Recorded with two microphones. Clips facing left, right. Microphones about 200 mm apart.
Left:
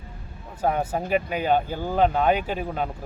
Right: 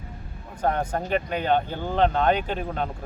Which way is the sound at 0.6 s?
5° left (ahead or behind).